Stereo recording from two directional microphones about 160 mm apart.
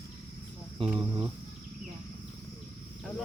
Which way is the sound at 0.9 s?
20° right (ahead or behind).